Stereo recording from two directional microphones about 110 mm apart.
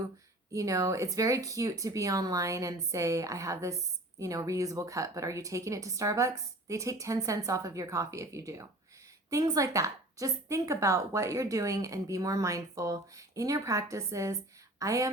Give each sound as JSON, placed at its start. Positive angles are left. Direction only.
{"t": 0.5, "sound": "speech", "side_deg": -30}